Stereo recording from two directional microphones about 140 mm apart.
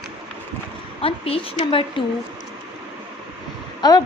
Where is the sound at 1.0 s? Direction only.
40° left (ahead or behind).